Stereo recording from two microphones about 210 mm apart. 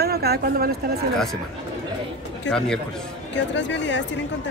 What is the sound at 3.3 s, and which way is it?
Speech, 60° left (ahead or behind).